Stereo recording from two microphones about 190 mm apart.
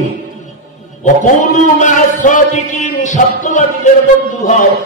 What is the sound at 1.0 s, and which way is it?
A man's voice, 40° left (ahead or behind).